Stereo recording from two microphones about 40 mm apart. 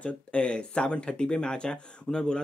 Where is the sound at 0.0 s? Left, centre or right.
Left.